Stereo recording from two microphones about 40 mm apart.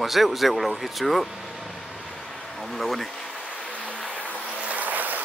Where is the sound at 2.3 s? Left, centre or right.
Centre.